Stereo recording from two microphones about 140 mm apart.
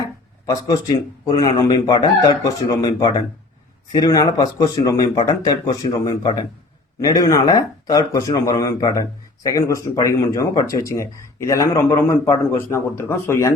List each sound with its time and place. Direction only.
0.0 s speech: 25° left (ahead or behind)